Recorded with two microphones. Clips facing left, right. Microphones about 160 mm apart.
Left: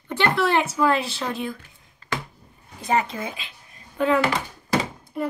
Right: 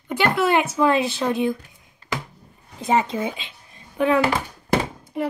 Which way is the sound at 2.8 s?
25° right (ahead or behind).